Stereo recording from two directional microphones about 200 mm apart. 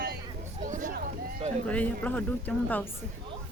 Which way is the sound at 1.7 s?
5° left (ahead or behind).